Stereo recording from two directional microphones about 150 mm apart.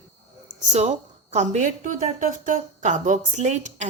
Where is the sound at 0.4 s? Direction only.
50° right (ahead or behind).